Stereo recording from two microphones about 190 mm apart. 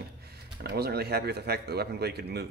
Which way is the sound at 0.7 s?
55° right (ahead or behind).